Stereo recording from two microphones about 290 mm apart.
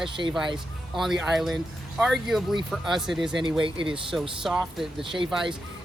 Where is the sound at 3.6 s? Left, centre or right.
Centre.